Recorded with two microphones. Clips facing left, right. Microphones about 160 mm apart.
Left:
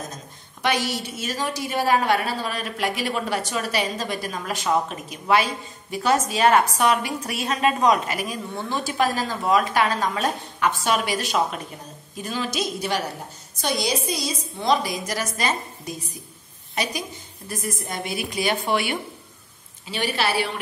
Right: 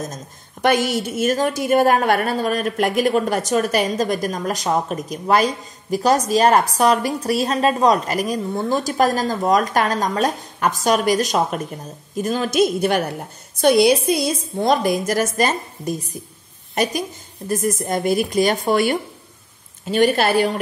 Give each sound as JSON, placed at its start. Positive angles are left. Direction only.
{"t": 0.0, "sound": "a woman's voice", "side_deg": -45}